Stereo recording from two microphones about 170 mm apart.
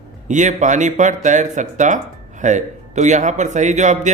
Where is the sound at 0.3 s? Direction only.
45° right (ahead or behind).